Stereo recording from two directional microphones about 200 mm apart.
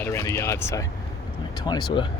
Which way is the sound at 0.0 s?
15° left (ahead or behind).